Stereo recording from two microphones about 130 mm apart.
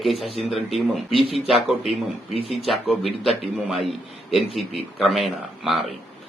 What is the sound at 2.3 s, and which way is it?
Speech, 50° left (ahead or behind).